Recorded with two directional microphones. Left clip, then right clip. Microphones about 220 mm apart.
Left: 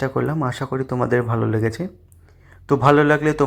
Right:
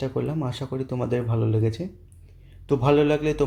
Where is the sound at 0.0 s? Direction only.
15° left (ahead or behind).